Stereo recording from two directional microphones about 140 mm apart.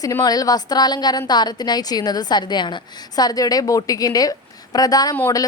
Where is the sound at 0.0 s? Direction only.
25° left (ahead or behind).